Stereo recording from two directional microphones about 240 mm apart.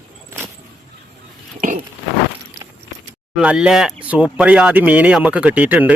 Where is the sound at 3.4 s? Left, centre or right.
Centre.